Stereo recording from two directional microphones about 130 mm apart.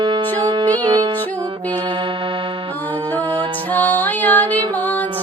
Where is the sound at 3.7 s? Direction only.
15° left (ahead or behind).